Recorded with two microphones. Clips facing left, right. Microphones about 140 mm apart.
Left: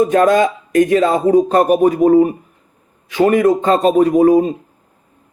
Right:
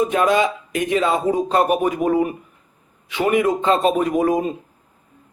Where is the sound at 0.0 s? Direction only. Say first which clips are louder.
Left 5 dB; 50° left (ahead or behind).